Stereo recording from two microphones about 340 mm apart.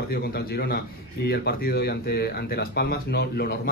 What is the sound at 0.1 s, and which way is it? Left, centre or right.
A man's voice, left.